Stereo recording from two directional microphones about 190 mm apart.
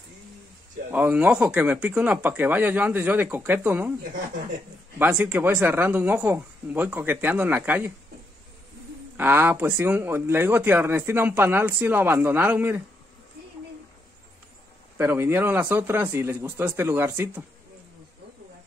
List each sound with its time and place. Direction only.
0.9 s speech: 10° right (ahead or behind)
4.9 s speech: 10° right (ahead or behind)
9.1 s speech: 10° right (ahead or behind)
15.0 s speech: 10° right (ahead or behind)